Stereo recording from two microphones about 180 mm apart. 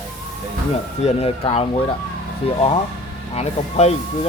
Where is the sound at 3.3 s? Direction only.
35° left (ahead or behind).